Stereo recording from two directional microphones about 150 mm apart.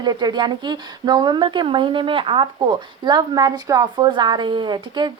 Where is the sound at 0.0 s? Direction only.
30° right (ahead or behind).